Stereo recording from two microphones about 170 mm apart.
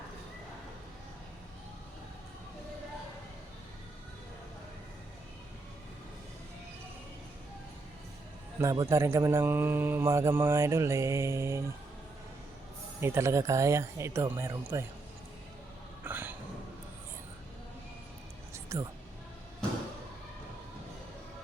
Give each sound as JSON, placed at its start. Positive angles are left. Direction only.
{"t": 8.6, "sound": "speech", "side_deg": -20}
{"t": 13.0, "sound": "speech", "side_deg": -15}
{"t": 16.0, "sound": "a sound", "side_deg": -10}
{"t": 18.5, "sound": "music", "side_deg": -15}